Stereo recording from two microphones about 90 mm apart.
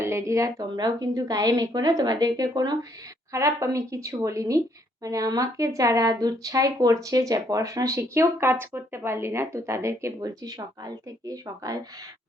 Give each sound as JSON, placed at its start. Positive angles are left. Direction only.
{"t": 0.0, "sound": "speech", "side_deg": -30}
{"t": 0.8, "sound": "a woman's voice", "side_deg": -45}
{"t": 3.3, "sound": "speech", "side_deg": -35}